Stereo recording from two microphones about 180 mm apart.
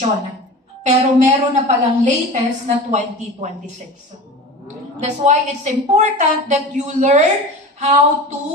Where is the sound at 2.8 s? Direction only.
40° right (ahead or behind).